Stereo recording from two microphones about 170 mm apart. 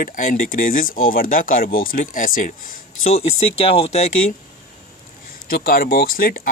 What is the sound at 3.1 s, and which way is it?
Speech, 35° left (ahead or behind).